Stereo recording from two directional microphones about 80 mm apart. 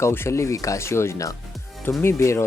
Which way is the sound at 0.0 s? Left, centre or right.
Left.